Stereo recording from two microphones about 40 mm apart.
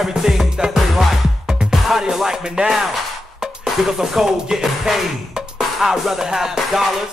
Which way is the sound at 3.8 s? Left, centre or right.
Centre.